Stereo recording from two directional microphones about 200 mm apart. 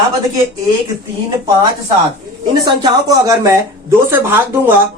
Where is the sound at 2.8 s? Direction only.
15° right (ahead or behind).